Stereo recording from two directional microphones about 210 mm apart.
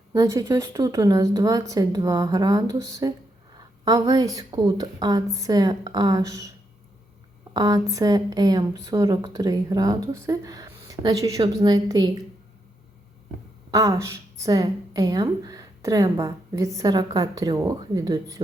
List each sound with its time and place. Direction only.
0.1 s a woman's voice: 15° right (ahead or behind)
7.5 s a woman's voice: 15° right (ahead or behind)
13.7 s a woman's voice: 15° right (ahead or behind)